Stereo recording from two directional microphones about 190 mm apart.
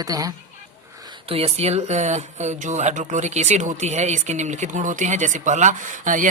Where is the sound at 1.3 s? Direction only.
30° right (ahead or behind).